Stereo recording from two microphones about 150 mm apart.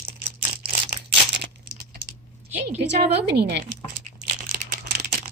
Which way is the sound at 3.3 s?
90° right.